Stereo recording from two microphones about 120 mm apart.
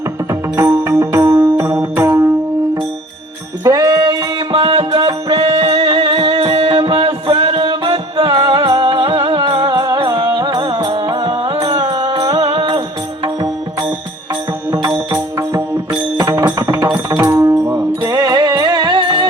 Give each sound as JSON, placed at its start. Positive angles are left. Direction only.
{"t": 0.5, "sound": "music", "side_deg": -20}
{"t": 3.6, "sound": "music", "side_deg": -30}
{"t": 4.5, "sound": "music", "side_deg": -50}
{"t": 4.9, "sound": "music", "side_deg": -35}
{"t": 14.7, "sound": "music", "side_deg": -30}